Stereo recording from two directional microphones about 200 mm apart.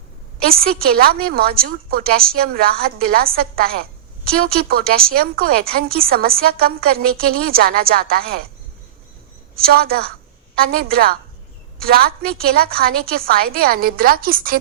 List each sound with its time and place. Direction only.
0.4 s a woman's voice: 50° right (ahead or behind)
9.6 s a woman's voice: 50° right (ahead or behind)